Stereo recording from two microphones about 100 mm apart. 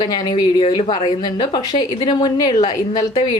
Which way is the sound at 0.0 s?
45° left (ahead or behind).